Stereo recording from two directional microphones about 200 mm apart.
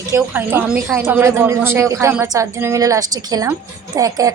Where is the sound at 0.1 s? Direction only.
10° right (ahead or behind).